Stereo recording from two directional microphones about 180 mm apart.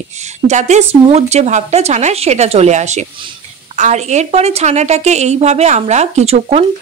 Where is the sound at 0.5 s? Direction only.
40° right (ahead or behind).